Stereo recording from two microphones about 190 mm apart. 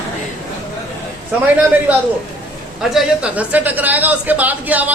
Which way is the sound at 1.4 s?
10° right (ahead or behind).